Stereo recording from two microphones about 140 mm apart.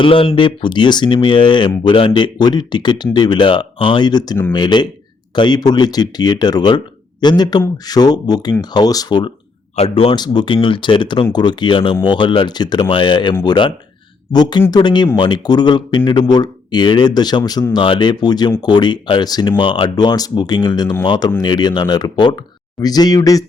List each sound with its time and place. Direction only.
0.0 s speech: 40° left (ahead or behind)
9.7 s speech: 45° left (ahead or behind); by 23.4 s 25° left (ahead or behind)